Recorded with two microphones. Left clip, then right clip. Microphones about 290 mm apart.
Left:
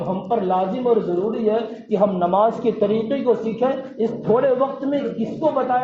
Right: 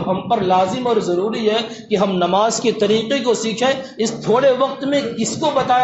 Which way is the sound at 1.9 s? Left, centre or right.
Right.